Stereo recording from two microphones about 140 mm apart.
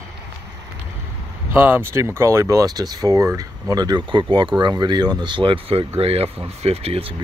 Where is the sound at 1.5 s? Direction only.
15° right (ahead or behind).